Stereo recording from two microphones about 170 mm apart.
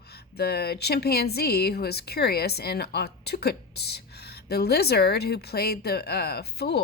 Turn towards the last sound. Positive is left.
turn(degrees=70)  # may be behind; listen again after turning